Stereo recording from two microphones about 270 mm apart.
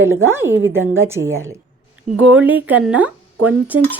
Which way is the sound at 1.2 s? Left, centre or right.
Right.